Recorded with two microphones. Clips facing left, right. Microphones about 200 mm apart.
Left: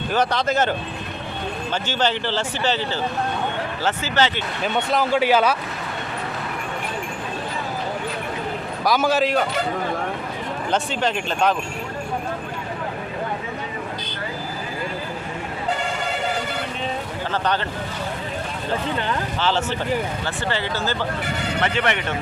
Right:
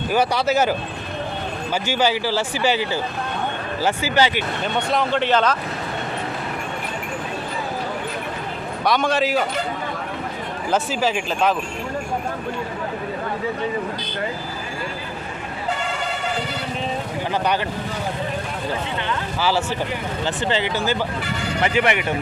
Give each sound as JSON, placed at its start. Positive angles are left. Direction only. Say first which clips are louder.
{"t": 0.1, "sound": "speech", "louder": "right 2 dB", "side_deg": -10}
{"t": 4.6, "sound": "speech", "louder": "left 2 dB", "side_deg": 0}
{"t": 8.8, "sound": "speech", "louder": "even", "side_deg": 5}
{"t": 10.7, "sound": "speech", "louder": "right 2 dB", "side_deg": -5}
{"t": 17.3, "sound": "speech", "louder": "right 1 dB", "side_deg": -10}
{"t": 19.4, "sound": "speech", "louder": "right 3 dB", "side_deg": -10}